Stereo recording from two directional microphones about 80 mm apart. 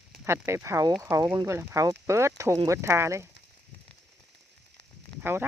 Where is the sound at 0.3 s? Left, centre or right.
Right.